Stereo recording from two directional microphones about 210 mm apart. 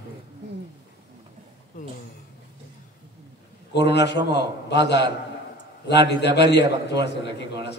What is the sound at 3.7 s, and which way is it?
A man's voice, 55° left (ahead or behind).